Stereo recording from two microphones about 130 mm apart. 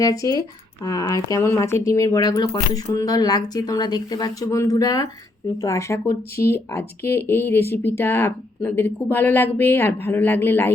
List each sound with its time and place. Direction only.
0.0 s speech: 25° left (ahead or behind)